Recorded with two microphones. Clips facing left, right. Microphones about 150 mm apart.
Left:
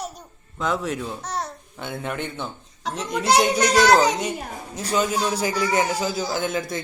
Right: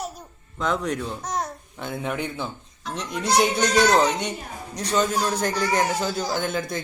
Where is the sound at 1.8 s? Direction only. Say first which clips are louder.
Right 1 dB; centre (ahead or behind).